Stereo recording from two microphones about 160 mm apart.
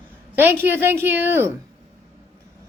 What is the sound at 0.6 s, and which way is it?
Speech, 15° right (ahead or behind).